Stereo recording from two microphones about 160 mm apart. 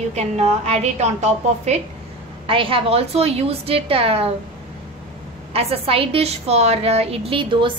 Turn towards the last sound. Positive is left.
turn(degrees=-30)  # may be behind; listen again after turning